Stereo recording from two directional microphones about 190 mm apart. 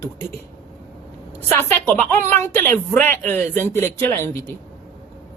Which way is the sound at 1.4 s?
10° left (ahead or behind).